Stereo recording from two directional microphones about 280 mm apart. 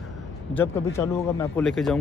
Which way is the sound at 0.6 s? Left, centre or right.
Centre.